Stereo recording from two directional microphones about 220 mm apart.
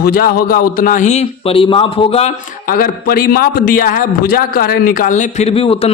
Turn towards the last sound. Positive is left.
turn(degrees=25)  # may be behind; listen again after turning